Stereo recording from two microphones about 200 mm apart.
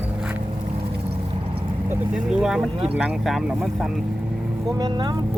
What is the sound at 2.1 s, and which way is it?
Speech, 5° right (ahead or behind).